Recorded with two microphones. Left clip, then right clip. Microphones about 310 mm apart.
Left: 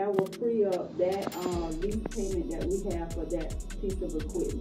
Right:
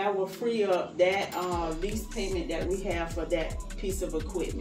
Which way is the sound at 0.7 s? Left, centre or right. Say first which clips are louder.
Right 4 dB; centre.